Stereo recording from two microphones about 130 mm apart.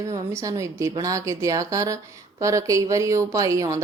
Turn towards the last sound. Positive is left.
turn(degrees=-25)  # may be behind; listen again after turning